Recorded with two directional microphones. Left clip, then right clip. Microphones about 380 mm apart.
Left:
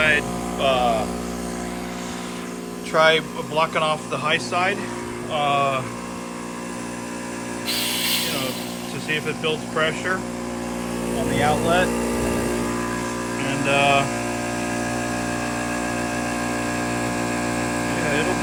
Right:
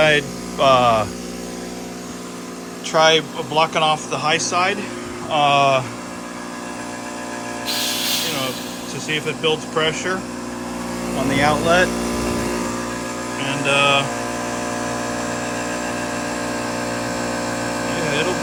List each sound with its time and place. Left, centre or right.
0.1 s a sound: centre
2.9 s speech: centre
7.7 s a sound: centre
9.0 s speech: centre
11.3 s speech: right
13.4 s mantra: centre